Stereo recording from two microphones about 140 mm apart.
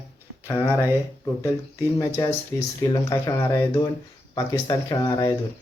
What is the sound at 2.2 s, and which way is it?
Speech, 30° left (ahead or behind).